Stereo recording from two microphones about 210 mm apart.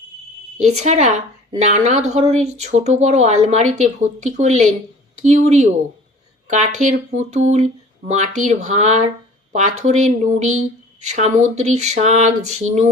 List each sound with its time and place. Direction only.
0.6 s speech: 35° right (ahead or behind)